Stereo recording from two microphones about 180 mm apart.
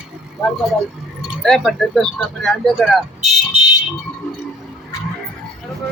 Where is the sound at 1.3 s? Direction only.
Centre (ahead or behind).